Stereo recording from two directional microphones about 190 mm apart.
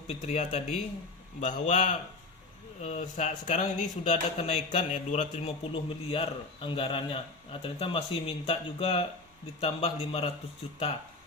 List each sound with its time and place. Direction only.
0.1 s a man's voice: 35° left (ahead or behind)